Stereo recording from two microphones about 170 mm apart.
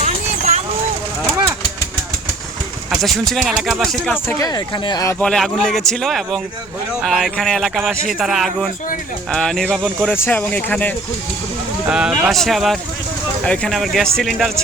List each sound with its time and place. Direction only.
0.0 s vehicle: 40° right (ahead or behind)
3.0 s speech: centre (ahead or behind)
4.4 s speech: 25° left (ahead or behind)
5.2 s speech: 5° left (ahead or behind)
9.6 s speech: 10° right (ahead or behind)
10.2 s speech: 10° left (ahead or behind)
11.9 s speech: 5° right (ahead or behind)